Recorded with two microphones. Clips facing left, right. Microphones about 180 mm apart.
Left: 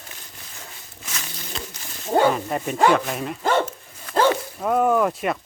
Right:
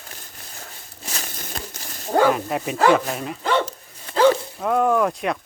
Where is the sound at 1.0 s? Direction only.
35° right (ahead or behind).